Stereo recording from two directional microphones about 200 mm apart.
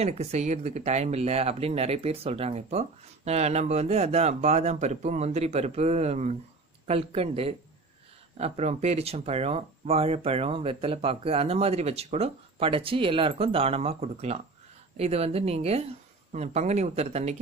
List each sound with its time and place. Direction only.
0.0 s speech: 35° right (ahead or behind)